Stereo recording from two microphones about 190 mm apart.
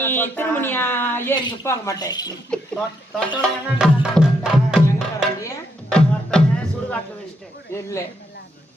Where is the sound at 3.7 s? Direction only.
5° right (ahead or behind).